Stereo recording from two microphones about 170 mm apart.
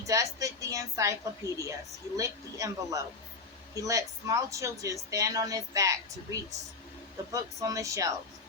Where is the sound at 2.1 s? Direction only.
20° right (ahead or behind).